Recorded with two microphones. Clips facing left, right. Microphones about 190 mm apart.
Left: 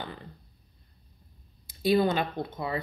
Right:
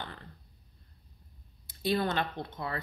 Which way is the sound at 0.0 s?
10° left (ahead or behind).